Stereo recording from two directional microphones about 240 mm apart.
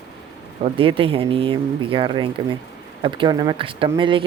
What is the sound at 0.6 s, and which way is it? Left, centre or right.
Speech, right.